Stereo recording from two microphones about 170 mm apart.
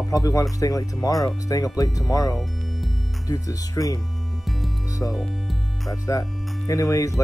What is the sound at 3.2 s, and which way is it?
Speech, 20° left (ahead or behind).